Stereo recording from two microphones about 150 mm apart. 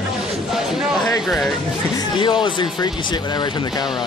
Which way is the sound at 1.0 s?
10° left (ahead or behind).